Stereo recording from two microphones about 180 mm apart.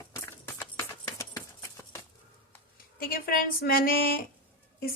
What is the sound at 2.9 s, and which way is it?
A woman's voice, 55° left (ahead or behind).